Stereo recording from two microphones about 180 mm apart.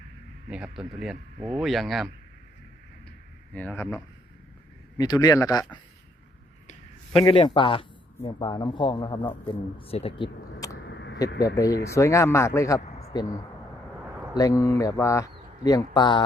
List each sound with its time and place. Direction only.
0.5 s speech: 5° right (ahead or behind)
3.5 s speech: 10° left (ahead or behind)
6.7 s a man's voice: 30° left (ahead or behind)
10.8 s a sound: 80° left
11.4 s speech: 20° left (ahead or behind)